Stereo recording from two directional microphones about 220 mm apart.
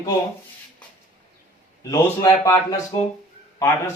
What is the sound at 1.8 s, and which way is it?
Speech, 15° left (ahead or behind).